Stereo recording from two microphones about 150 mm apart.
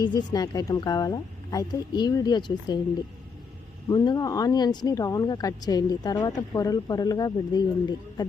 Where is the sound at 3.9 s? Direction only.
25° left (ahead or behind).